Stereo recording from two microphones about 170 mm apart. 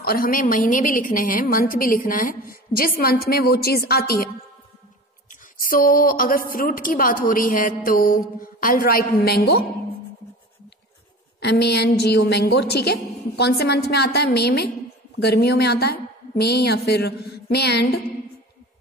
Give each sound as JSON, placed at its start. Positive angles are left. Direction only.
{"t": 0.0, "sound": "a woman's voice", "side_deg": 60}
{"t": 5.3, "sound": "a woman's voice", "side_deg": 55}
{"t": 11.3, "sound": "a woman's voice", "side_deg": 80}